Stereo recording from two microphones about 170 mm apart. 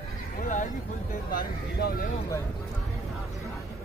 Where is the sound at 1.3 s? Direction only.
60° left (ahead or behind).